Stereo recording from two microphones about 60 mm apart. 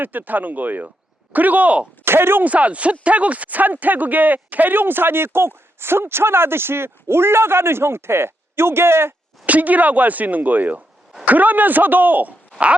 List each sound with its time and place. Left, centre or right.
0.0 s a man's voice: right
2.0 s speech: right
2.4 s speech: right
9.5 s a man's voice: right